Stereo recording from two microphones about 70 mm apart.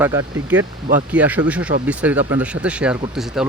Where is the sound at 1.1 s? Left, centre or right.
Right.